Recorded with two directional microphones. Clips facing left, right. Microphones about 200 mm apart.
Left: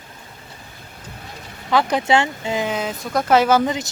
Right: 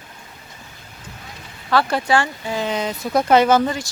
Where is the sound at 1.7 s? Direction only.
20° left (ahead or behind).